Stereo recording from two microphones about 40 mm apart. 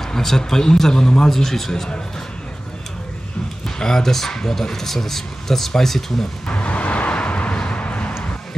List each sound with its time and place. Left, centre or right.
0.0 s speech: centre
1.3 s speech: centre
3.6 s speech: centre
6.4 s a sound: left